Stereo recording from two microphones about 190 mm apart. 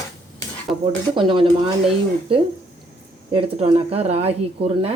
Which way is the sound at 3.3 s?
30° right (ahead or behind).